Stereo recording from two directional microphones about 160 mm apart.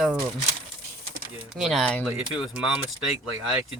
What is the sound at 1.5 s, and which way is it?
Speech, centre (ahead or behind).